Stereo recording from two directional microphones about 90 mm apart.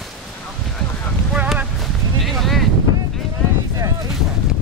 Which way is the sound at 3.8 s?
45° right (ahead or behind).